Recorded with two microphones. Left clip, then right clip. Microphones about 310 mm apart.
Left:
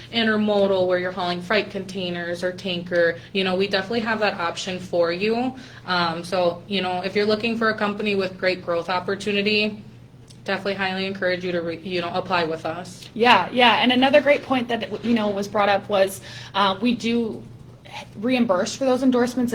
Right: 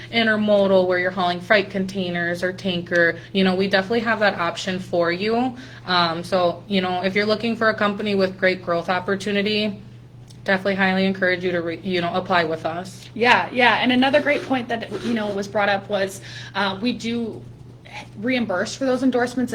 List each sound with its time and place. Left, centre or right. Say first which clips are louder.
0.1 s a woman's voice: right 3 dB; right
13.1 s a woman's voice: left 1 dB; left